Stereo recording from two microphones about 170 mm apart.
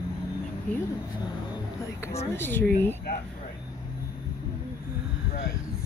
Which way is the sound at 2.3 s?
10° left (ahead or behind).